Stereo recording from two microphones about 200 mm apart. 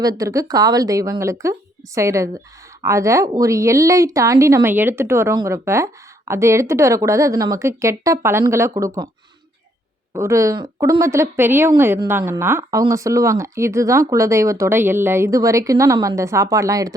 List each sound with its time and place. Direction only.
0.0 s a woman's voice: 15° right (ahead or behind)
10.2 s a woman's voice: 15° right (ahead or behind)